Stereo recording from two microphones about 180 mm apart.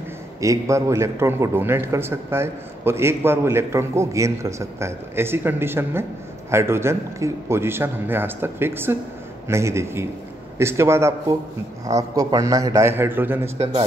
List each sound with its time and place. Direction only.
0.4 s a man's voice: 15° right (ahead or behind)